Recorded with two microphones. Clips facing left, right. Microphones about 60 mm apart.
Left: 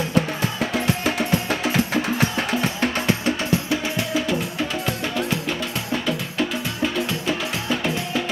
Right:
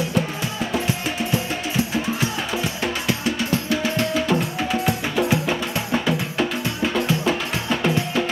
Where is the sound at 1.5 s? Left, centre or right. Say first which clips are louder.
Left 2 dB; left.